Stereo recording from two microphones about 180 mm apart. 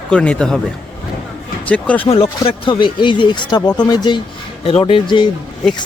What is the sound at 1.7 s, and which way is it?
Speech, 5° left (ahead or behind).